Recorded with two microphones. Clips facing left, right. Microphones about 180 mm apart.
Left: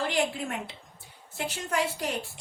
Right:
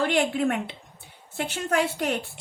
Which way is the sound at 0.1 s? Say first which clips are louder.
Right 6 dB; 60° right (ahead or behind).